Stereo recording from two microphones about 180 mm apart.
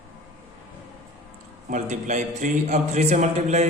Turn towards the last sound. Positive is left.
turn(degrees=-40)  # may be behind; listen again after turning